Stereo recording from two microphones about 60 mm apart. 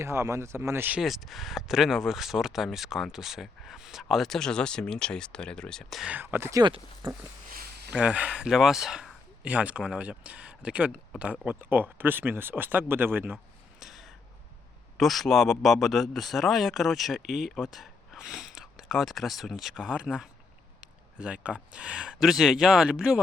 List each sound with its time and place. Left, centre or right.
0.0 s speech: right
1.0 s speech: centre
4.3 s speech: centre
6.1 s speech: right
8.0 s speech: centre
9.4 s speech: right
13.7 s a sound: centre
14.9 s speech: centre
19.8 s speech: centre